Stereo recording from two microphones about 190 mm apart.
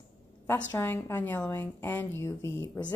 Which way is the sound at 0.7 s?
10° left (ahead or behind).